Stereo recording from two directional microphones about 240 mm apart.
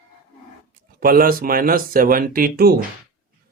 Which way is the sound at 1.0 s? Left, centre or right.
Right.